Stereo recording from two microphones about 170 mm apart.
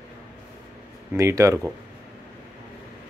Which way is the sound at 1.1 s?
15° right (ahead or behind).